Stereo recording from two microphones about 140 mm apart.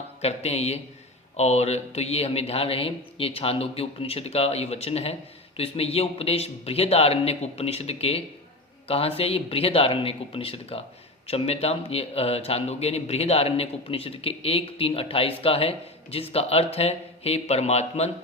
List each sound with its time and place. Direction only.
0.2 s a man's voice: 50° left (ahead or behind)